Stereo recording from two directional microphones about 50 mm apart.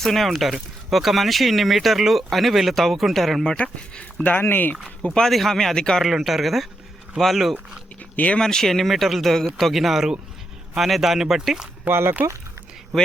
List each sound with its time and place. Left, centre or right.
0.0 s speech: centre
3.6 s speech: left
4.3 s speech: left
5.3 s speech: centre
6.0 s speech: centre
8.1 s speech: left
8.4 s speech: centre
11.9 s speech: right
12.9 s speech: centre